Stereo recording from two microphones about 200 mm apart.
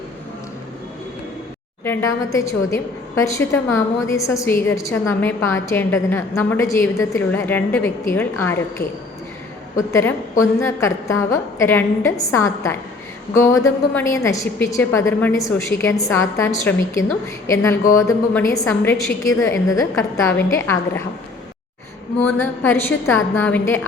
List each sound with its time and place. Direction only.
1.8 s a woman's voice: 10° left (ahead or behind)
9.7 s a woman's voice: 15° left (ahead or behind)
22.2 s a woman's voice: 10° left (ahead or behind)